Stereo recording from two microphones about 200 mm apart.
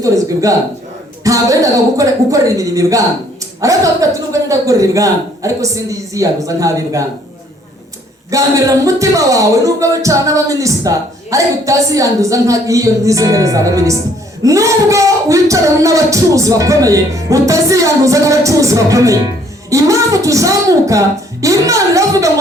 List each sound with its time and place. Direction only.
0.0 s speech: 15° right (ahead or behind)
8.3 s speech: 15° right (ahead or behind)